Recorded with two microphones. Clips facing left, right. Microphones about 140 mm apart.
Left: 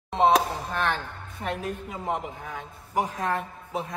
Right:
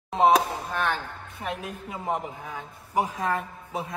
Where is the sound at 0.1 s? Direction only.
Centre (ahead or behind).